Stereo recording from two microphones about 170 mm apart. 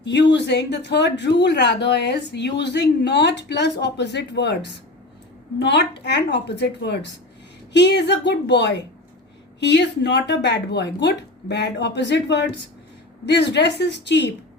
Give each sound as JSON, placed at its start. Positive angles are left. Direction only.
{"t": 0.0, "sound": "a woman's voice", "side_deg": 90}